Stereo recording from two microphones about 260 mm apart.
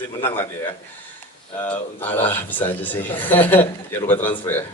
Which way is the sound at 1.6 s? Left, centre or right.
Centre.